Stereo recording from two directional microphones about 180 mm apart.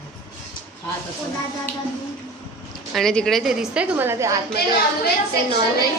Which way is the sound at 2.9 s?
5° left (ahead or behind).